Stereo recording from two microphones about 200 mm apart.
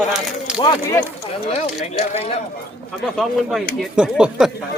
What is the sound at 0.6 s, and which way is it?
Speech, 20° left (ahead or behind).